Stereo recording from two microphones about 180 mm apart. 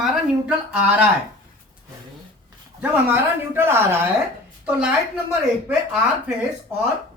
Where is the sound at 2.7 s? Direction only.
10° right (ahead or behind).